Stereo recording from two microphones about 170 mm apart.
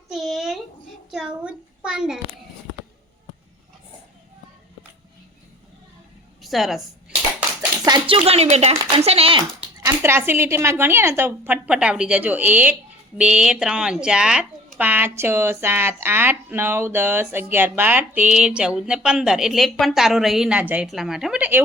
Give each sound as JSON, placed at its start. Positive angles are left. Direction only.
{"t": 0.1, "sound": "a sound", "side_deg": 0}
{"t": 1.1, "sound": "a child's voice", "side_deg": -5}
{"t": 6.4, "sound": "a woman's voice", "side_deg": 0}
{"t": 7.9, "sound": "speech", "side_deg": -30}
{"t": 9.8, "sound": "a woman's voice", "side_deg": -15}